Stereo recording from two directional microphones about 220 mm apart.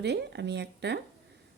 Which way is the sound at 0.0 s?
50° right (ahead or behind).